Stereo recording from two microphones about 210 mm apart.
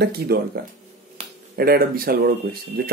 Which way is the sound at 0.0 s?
50° right (ahead or behind).